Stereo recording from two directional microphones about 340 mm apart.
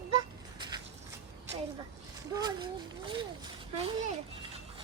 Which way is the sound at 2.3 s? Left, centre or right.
Centre.